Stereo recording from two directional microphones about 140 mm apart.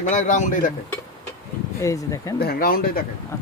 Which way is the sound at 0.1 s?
65° left (ahead or behind).